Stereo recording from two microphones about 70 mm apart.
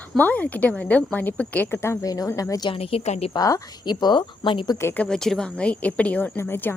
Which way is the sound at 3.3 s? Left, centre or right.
Left.